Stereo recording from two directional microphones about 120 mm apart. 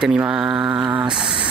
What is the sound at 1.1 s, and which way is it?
Speech, 40° right (ahead or behind).